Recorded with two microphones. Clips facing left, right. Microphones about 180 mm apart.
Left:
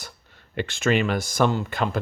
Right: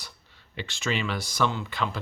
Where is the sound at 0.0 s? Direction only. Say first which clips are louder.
Left 5 dB; 50° left (ahead or behind).